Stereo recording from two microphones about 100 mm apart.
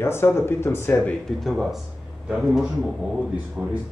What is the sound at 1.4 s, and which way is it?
Speech, centre (ahead or behind).